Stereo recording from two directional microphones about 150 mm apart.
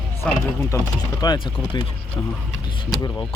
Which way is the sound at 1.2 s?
30° left (ahead or behind).